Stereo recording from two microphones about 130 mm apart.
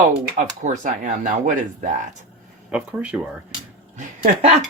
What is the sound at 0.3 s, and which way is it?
Speech, 75° right (ahead or behind).